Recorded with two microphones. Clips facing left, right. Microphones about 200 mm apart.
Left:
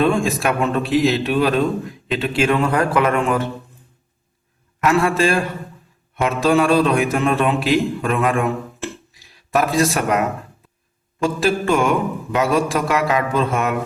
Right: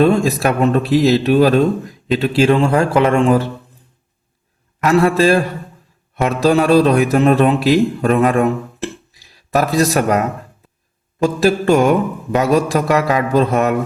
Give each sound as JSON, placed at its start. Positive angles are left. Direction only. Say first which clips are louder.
{"t": 0.0, "sound": "speech", "louder": "right 4 dB", "side_deg": -40}
{"t": 4.8, "sound": "a man's voice", "louder": "right 4 dB", "side_deg": -35}
{"t": 11.2, "sound": "speech", "louder": "right 4 dB", "side_deg": -40}